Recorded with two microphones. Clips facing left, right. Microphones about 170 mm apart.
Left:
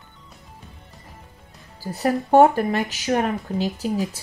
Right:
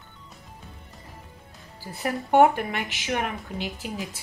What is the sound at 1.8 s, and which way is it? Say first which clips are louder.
Speech: left 7 dB; 40° left (ahead or behind).